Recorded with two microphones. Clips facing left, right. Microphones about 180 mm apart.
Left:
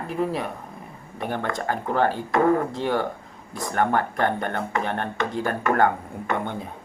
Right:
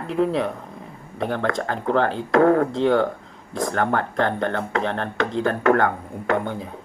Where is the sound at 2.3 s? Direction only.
75° right (ahead or behind).